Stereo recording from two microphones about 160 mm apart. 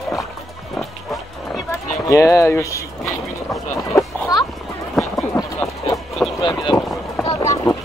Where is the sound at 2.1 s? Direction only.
20° left (ahead or behind).